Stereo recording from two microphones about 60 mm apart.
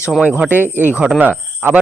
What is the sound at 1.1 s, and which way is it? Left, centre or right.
Speech, right.